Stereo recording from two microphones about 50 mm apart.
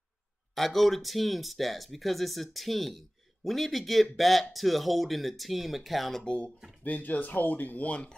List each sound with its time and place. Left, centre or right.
0.6 s speech: centre
6.2 s speech: left
6.8 s speech: left